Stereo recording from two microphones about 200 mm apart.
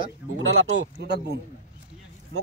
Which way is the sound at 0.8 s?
55° right (ahead or behind).